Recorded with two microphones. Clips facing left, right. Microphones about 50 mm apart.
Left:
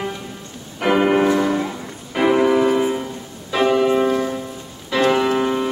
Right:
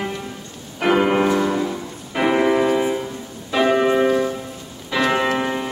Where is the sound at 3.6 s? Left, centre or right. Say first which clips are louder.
Even; right; by 5.6 s centre.